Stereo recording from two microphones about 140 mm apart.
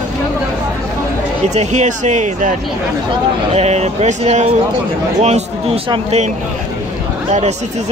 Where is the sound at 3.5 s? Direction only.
50° right (ahead or behind).